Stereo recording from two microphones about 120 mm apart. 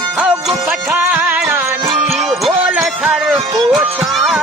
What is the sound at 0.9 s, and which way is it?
Music, 15° right (ahead or behind).